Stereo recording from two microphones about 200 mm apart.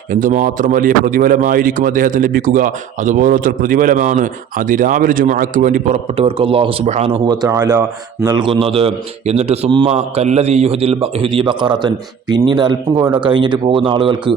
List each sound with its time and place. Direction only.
0.1 s speech: 40° right (ahead or behind); by 14.3 s 25° right (ahead or behind)